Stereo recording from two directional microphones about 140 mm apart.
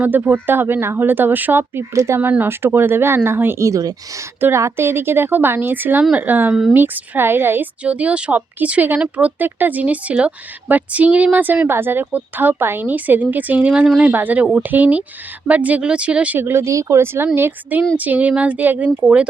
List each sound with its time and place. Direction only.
0.0 s a woman's voice: 15° right (ahead or behind)